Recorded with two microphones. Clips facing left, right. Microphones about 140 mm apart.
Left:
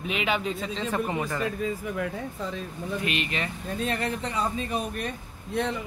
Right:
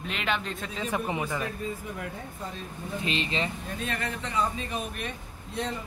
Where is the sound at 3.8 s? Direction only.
35° left (ahead or behind).